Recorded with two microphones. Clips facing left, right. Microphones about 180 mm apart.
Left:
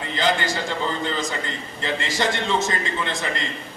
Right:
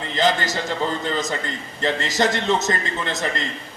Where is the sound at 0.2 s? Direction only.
40° right (ahead or behind).